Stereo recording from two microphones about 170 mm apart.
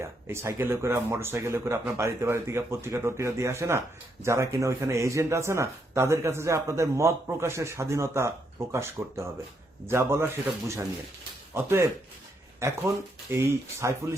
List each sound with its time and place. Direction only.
0.0 s speech: 15° right (ahead or behind)